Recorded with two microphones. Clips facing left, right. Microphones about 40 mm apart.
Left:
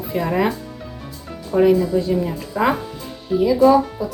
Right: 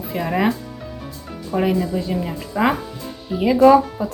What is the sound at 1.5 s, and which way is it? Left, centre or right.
A woman's voice, centre.